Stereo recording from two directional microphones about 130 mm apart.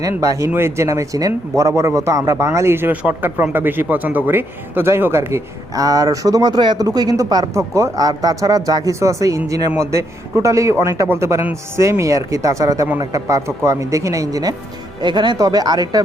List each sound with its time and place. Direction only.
0.0 s speech: 25° right (ahead or behind)